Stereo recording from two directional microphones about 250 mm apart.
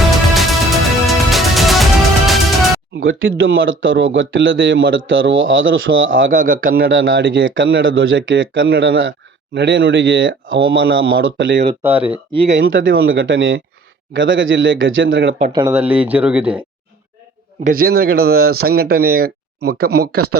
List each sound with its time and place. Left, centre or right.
0.3 s music: centre
3.0 s speech: right
6.3 s speech: right
6.8 s speech: right
11.8 s speech: centre
12.1 s speech: right
12.5 s speech: right
15.5 s speech: centre
17.6 s speech: right